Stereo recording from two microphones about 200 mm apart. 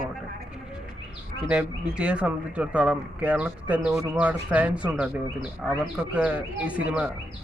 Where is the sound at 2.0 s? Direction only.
5° right (ahead or behind).